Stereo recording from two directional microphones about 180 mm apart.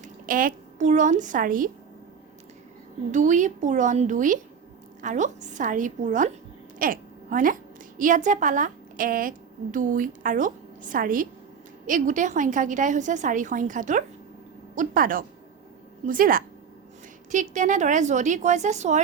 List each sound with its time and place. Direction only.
0.0 s speech: 50° right (ahead or behind)
3.1 s a woman's voice: 40° right (ahead or behind)
17.5 s a woman's voice: 45° right (ahead or behind)